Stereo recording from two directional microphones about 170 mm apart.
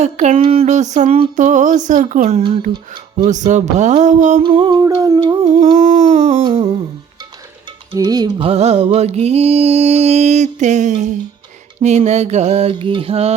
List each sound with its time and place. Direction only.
0.0 s a sound: 45° right (ahead or behind)
2.7 s speech: 25° right (ahead or behind)
3.2 s a sound: 45° right (ahead or behind)
4.4 s humming: 25° right (ahead or behind)
5.7 s mantra: 50° right (ahead or behind)
7.9 s humming: 20° right (ahead or behind)
8.4 s mantra: 40° right (ahead or behind)